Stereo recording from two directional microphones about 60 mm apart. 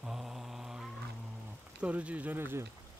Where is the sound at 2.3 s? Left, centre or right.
Right.